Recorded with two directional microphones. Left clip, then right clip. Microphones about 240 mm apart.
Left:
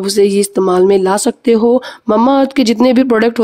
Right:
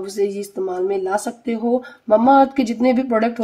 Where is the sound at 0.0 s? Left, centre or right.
Left.